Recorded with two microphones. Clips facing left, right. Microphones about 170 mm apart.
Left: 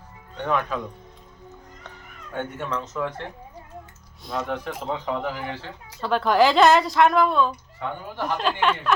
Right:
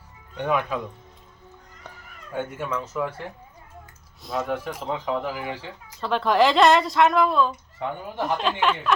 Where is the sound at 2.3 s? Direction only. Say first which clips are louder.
Right 1 dB; 5° right (ahead or behind).